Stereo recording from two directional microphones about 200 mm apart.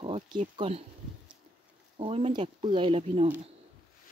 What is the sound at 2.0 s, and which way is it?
Speech, 30° right (ahead or behind).